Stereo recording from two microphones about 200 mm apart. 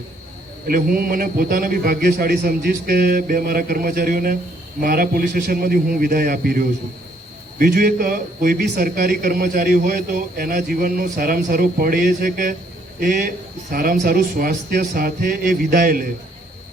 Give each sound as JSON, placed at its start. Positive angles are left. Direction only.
{"t": 0.7, "sound": "a man's voice", "side_deg": -45}